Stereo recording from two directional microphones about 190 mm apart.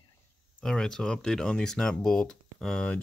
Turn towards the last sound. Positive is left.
turn(degrees=5)  # may be behind; listen again after turning